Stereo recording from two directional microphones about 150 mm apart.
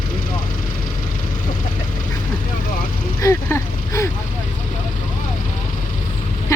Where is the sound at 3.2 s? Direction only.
15° left (ahead or behind).